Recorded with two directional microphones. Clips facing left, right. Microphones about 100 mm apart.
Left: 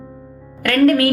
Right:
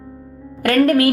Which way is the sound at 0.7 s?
30° right (ahead or behind).